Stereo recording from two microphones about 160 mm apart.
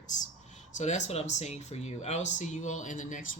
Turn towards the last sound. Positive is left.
turn(degrees=50)  # may be behind; listen again after turning